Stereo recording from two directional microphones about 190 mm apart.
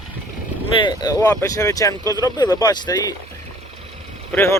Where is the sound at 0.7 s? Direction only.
20° left (ahead or behind).